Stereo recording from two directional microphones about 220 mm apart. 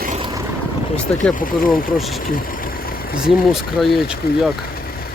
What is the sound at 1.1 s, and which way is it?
Speech, 5° left (ahead or behind).